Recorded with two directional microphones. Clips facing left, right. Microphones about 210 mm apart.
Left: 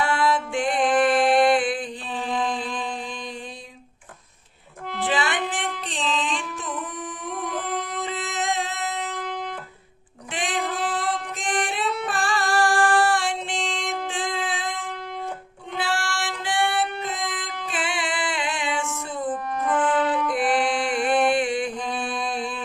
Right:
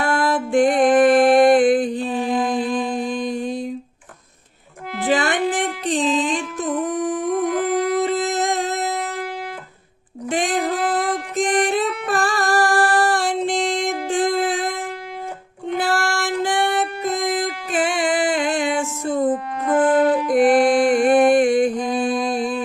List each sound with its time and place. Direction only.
0.0 s music: 45° right (ahead or behind)
5.0 s music: 45° right (ahead or behind)
7.6 s a sound: 10° right (ahead or behind)
8.0 s a sound: 40° right (ahead or behind)
10.2 s music: 45° right (ahead or behind)
15.8 s singing: 40° right (ahead or behind)
19.7 s music: 40° right (ahead or behind)